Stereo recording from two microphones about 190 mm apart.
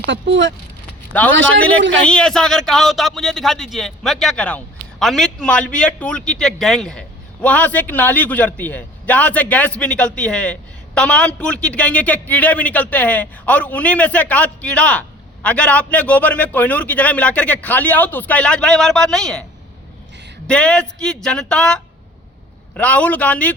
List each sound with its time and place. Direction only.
0.1 s a man's voice: 75° right (ahead or behind)
1.9 s a man's voice: 5° left (ahead or behind)
20.5 s a man's voice: 5° left (ahead or behind)